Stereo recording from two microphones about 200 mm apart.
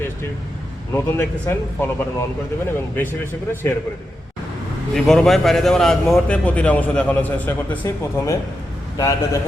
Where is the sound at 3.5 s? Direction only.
10° left (ahead or behind).